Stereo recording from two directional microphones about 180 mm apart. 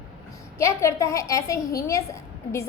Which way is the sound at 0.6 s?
15° left (ahead or behind).